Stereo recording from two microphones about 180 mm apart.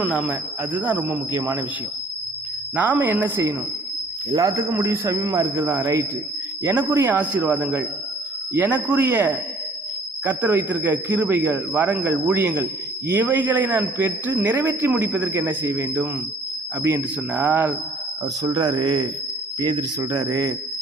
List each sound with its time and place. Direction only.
0.0 s a man's voice: 5° right (ahead or behind)
2.7 s a man's voice: 10° right (ahead or behind)
18.4 s a man's voice: 25° right (ahead or behind)